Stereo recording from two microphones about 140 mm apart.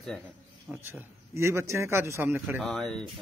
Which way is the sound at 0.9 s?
20° right (ahead or behind).